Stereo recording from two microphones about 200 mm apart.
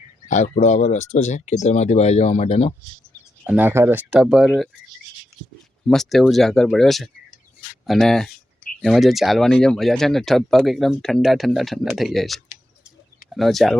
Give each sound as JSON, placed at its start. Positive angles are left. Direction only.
{"t": 0.3, "sound": "speech", "side_deg": 40}
{"t": 3.4, "sound": "speech", "side_deg": -10}
{"t": 5.9, "sound": "speech", "side_deg": 0}